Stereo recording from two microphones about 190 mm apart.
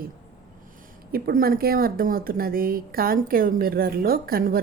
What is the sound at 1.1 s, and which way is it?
A woman's voice, 50° right (ahead or behind).